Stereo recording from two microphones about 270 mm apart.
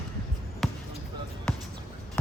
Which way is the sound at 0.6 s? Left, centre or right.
Centre.